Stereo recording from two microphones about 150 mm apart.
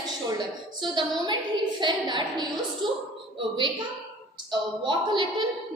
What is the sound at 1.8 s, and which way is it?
Speech, 30° right (ahead or behind).